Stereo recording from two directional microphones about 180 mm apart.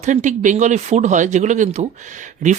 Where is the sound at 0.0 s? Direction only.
45° right (ahead or behind).